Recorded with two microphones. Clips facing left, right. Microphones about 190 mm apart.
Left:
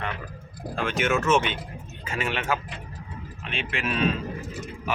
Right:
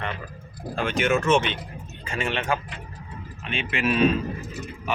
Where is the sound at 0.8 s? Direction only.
Centre (ahead or behind).